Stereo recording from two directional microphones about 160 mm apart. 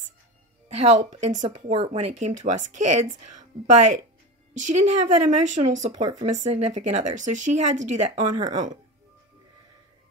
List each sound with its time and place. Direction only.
0.7 s speech: 45° right (ahead or behind)